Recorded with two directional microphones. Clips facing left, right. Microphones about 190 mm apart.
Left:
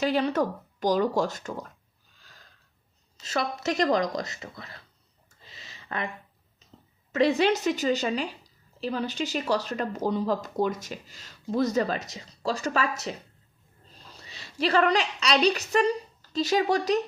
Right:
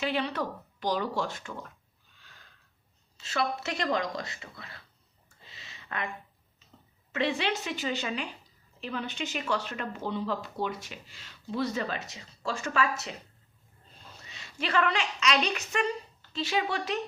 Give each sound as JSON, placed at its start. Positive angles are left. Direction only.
{"t": 0.0, "sound": "speech", "side_deg": 40}
{"t": 3.2, "sound": "speech", "side_deg": 40}
{"t": 5.4, "sound": "a sound", "side_deg": 35}
{"t": 7.1, "sound": "speech", "side_deg": 40}
{"t": 14.2, "sound": "a woman's voice", "side_deg": 35}